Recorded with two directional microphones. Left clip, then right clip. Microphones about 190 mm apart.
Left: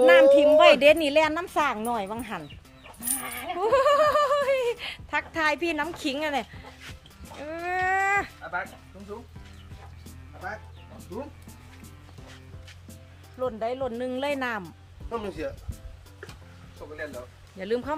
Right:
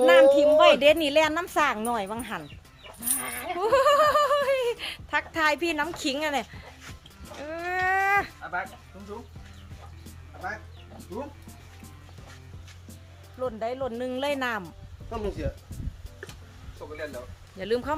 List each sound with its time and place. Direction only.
0.0 s speech: 15° left (ahead or behind)
3.2 s dog: 45° right (ahead or behind)
3.6 s a sound: 15° left (ahead or behind)
9.1 s speech: 10° right (ahead or behind)
11.1 s music: centre (ahead or behind)
13.4 s speech: 5° left (ahead or behind)
15.1 s speech: 20° left (ahead or behind)
17.1 s speech: centre (ahead or behind)